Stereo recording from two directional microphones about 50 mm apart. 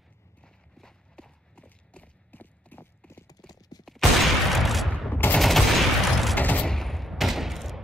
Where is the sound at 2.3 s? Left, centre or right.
Left.